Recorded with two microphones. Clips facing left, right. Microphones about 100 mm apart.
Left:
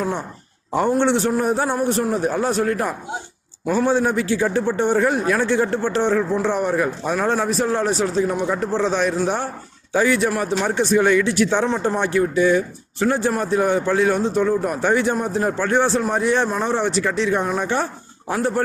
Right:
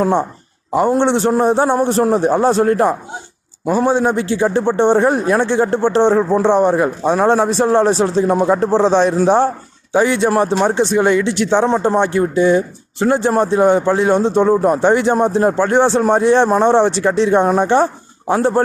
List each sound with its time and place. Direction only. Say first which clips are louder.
0.0 s a man's voice: right 9 dB; 35° right (ahead or behind)
0.9 s a man's voice: right 3 dB; 20° right (ahead or behind)
3.7 s a man's voice: right 4 dB; 20° right (ahead or behind)